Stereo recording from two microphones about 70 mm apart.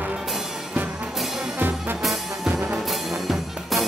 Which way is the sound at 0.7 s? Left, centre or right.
Right.